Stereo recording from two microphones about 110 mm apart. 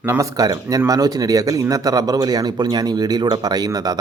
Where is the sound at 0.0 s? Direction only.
25° right (ahead or behind).